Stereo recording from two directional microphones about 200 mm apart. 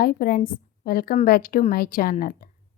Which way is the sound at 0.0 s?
50° left (ahead or behind).